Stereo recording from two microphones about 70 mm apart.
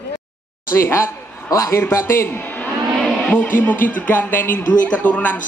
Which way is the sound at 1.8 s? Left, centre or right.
Left.